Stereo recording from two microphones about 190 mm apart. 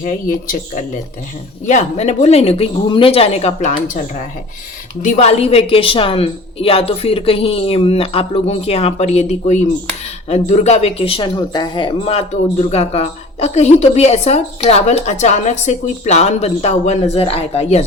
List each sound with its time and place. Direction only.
0.0 s speech: 45° left (ahead or behind)
5.0 s speech: 35° left (ahead or behind)